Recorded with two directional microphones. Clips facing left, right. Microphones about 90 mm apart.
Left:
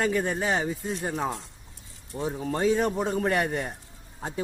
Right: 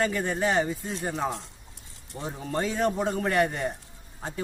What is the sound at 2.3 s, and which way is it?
Speech, 5° left (ahead or behind).